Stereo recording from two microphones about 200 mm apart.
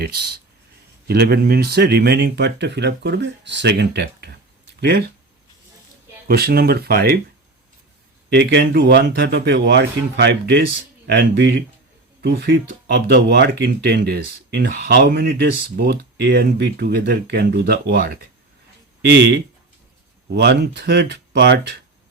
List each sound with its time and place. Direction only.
0.0 s speech: 50° right (ahead or behind)
6.2 s speech: 50° right (ahead or behind)
8.3 s speech: 55° right (ahead or behind)